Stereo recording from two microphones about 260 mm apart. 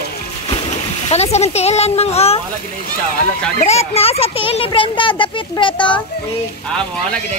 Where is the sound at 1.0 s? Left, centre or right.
Left.